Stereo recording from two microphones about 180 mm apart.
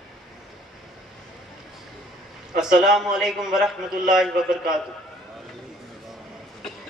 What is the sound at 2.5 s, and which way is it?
A man's voice, 5° right (ahead or behind).